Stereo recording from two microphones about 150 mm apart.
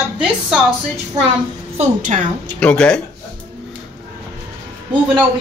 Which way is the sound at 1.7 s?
55° right (ahead or behind).